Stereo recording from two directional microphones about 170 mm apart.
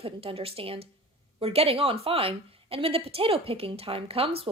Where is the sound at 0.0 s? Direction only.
35° right (ahead or behind).